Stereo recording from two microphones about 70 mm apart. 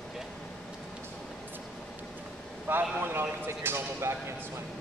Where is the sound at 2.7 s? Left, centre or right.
Right.